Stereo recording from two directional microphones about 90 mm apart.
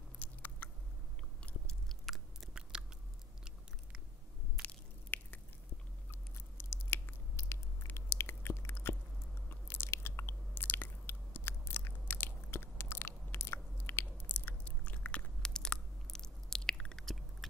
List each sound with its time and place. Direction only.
0.2 s chewing: 20° left (ahead or behind)
1.4 s chewing: centre (ahead or behind)
5.1 s biting: 20° left (ahead or behind)
6.3 s a sound: 25° left (ahead or behind)
9.5 s chewing: 25° left (ahead or behind); by 17.5 s centre (ahead or behind)